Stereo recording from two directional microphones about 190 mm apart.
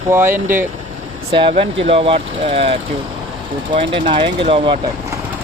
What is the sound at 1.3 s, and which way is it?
Speech, 30° right (ahead or behind).